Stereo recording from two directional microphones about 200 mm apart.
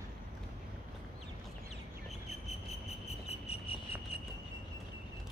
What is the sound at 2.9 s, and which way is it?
Cricket, 30° left (ahead or behind).